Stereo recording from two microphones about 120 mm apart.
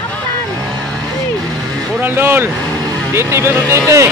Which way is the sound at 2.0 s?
20° right (ahead or behind).